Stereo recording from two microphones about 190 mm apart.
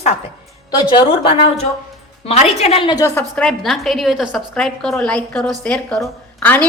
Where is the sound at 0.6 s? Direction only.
25° left (ahead or behind).